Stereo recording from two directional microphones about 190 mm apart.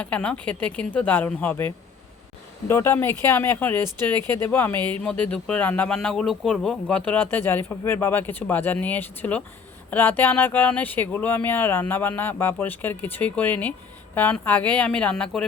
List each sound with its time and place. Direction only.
0.0 s speech: 5° left (ahead or behind)